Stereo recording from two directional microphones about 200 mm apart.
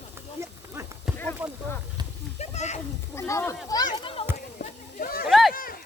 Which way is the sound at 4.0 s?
25° left (ahead or behind).